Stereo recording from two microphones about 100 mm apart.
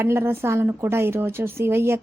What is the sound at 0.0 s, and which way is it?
A woman's voice, 25° right (ahead or behind).